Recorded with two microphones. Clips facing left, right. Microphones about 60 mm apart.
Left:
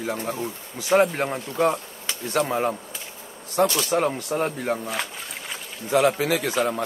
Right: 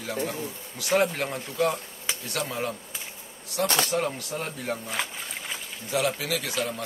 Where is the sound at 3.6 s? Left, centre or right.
Right.